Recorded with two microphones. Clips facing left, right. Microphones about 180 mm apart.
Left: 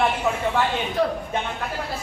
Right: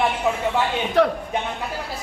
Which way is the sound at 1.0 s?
70° right (ahead or behind).